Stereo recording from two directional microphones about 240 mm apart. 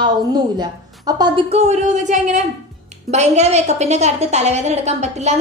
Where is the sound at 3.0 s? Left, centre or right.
Right.